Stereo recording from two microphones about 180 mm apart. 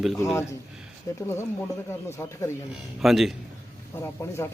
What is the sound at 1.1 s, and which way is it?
Speech, 20° left (ahead or behind).